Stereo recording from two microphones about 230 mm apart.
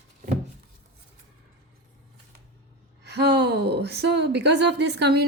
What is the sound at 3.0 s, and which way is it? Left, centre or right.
A woman's voice, right.